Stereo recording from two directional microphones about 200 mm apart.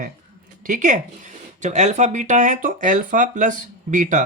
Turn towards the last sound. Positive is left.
turn(degrees=-40)  # may be behind; listen again after turning